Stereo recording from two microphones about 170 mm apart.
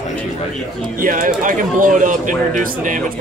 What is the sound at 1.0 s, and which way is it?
Speech, 55° right (ahead or behind).